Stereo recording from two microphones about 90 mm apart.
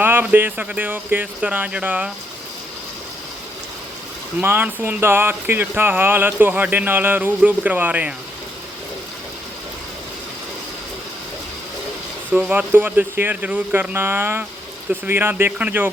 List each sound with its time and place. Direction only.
0.0 s speech: 20° right (ahead or behind)
4.4 s speech: 20° right (ahead or behind)
12.3 s speech: 20° right (ahead or behind)